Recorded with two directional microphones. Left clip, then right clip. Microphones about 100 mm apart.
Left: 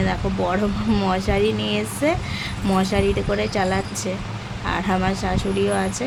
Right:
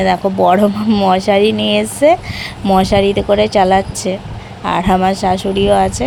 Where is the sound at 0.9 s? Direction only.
50° right (ahead or behind).